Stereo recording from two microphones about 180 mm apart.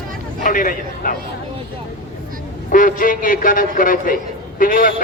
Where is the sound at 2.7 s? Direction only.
50° left (ahead or behind).